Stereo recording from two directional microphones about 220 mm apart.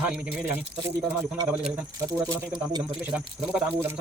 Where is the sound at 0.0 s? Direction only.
5° right (ahead or behind).